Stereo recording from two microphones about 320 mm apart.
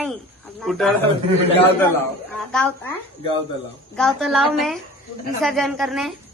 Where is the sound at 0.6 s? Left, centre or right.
Centre.